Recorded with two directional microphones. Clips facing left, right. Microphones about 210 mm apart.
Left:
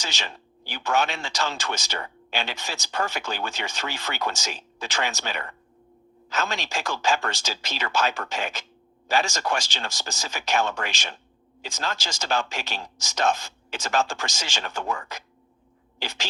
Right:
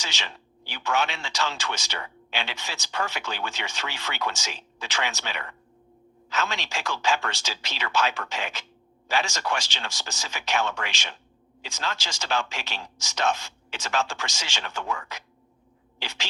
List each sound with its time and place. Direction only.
0.0 s a man's voice: 45° left (ahead or behind)